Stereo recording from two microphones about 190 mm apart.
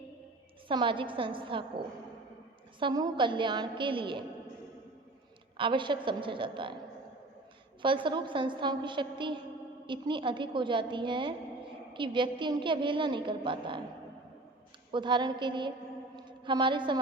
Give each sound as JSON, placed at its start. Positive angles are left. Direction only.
{"t": 0.7, "sound": "a woman's voice", "side_deg": -25}
{"t": 2.8, "sound": "a woman's voice", "side_deg": -20}
{"t": 5.5, "sound": "a woman's voice", "side_deg": -25}
{"t": 7.8, "sound": "a woman's voice", "side_deg": -25}
{"t": 14.9, "sound": "a woman's voice", "side_deg": -25}
{"t": 16.1, "sound": "a sound", "side_deg": -25}